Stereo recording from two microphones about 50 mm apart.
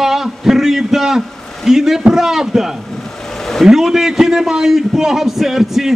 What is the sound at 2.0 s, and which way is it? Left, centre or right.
A man's voice, centre.